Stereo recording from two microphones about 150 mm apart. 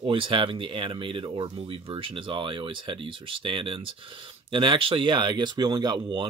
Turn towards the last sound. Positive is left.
turn(degrees=-30)  # may be behind; listen again after turning